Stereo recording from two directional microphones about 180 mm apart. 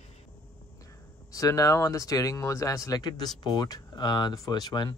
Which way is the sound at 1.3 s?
20° left (ahead or behind).